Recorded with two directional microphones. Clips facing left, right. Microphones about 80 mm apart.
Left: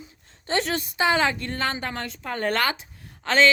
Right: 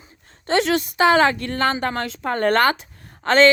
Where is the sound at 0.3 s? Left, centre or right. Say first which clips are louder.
Right 6 dB; right.